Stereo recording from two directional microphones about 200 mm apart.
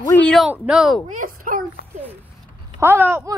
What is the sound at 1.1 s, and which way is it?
Speech, 45° right (ahead or behind).